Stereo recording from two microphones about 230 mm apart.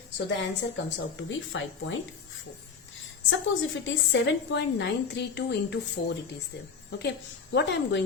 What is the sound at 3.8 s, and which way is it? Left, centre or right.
A woman's voice, left.